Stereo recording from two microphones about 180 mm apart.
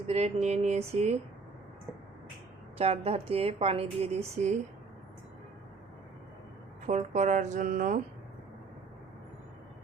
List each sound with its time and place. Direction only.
0.1 s speech: 35° right (ahead or behind)
2.7 s speech: 35° right (ahead or behind)
6.8 s speech: 40° right (ahead or behind)